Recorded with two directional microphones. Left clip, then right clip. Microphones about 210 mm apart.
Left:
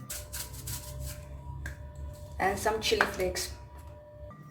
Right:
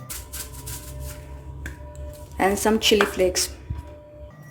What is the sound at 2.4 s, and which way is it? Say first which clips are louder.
Speech: right 8 dB; 45° right (ahead or behind).